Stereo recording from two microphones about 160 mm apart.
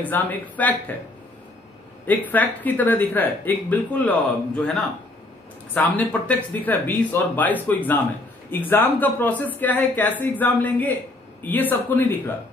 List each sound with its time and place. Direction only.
0.0 s speech: 10° left (ahead or behind)
2.0 s speech: 10° left (ahead or behind)
5.8 s speech: 10° left (ahead or behind)